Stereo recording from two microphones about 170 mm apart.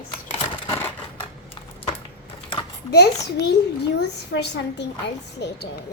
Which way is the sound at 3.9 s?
85° left.